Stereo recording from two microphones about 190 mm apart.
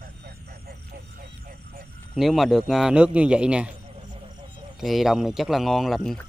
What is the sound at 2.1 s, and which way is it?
A man's voice, centre (ahead or behind).